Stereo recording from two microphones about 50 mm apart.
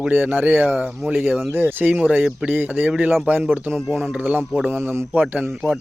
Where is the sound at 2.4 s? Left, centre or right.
Right.